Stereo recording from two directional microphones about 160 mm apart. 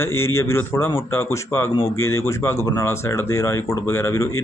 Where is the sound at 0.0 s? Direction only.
15° left (ahead or behind).